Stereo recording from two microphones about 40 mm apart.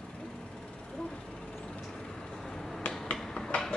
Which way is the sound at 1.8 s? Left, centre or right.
Centre.